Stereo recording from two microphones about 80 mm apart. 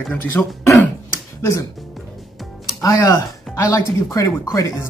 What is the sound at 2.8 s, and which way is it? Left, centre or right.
Speech, left.